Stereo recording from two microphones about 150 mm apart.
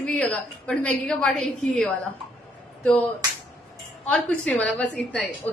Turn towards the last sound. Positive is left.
turn(degrees=10)  # may be behind; listen again after turning